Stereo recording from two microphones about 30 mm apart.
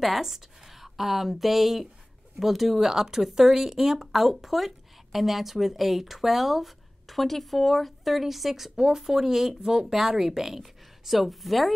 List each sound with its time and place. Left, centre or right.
0.0 s speech: centre
10.6 s speech: centre